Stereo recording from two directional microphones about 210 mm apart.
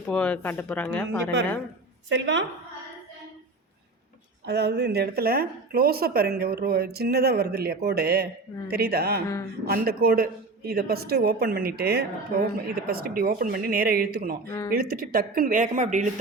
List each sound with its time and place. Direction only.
0.0 s speech: 5° left (ahead or behind)
2.0 s a woman's voice: 60° right (ahead or behind)
4.4 s a woman's voice: 50° right (ahead or behind); by 16.0 s 35° right (ahead or behind)